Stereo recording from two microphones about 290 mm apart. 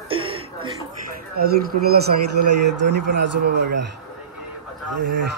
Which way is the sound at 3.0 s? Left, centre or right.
Right.